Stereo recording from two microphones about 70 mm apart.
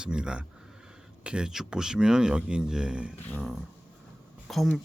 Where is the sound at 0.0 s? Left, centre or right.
Centre.